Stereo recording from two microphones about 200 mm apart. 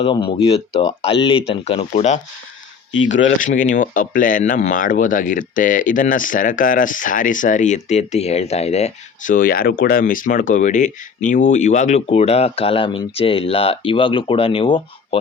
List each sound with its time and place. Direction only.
0.3 s speech: 30° left (ahead or behind)
3.2 s speech: 40° left (ahead or behind)